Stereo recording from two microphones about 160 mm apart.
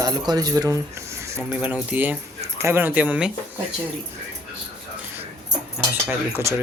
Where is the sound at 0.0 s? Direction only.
25° right (ahead or behind); by 3.3 s 5° right (ahead or behind).